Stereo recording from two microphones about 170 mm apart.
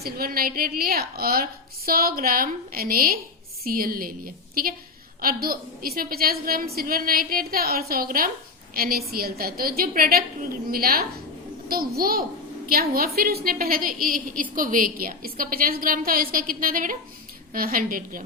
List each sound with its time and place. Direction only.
0.0 s a woman's voice: 60° right (ahead or behind)